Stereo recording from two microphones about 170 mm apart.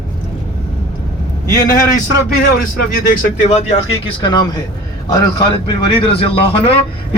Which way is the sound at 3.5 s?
40° left (ahead or behind).